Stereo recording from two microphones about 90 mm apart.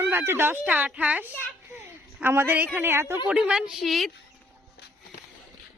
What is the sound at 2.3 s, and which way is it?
Speech, 20° right (ahead or behind).